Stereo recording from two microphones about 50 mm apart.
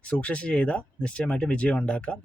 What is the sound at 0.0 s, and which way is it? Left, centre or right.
Speech, left.